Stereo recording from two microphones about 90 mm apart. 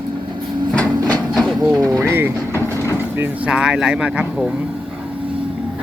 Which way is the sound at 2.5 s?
30° left (ahead or behind).